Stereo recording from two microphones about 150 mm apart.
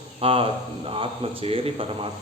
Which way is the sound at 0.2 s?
40° right (ahead or behind).